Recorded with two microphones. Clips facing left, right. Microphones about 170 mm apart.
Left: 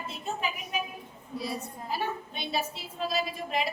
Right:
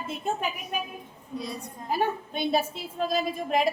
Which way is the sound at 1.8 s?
50° right (ahead or behind).